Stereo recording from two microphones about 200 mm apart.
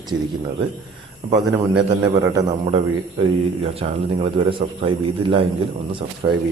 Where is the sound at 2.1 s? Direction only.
15° right (ahead or behind).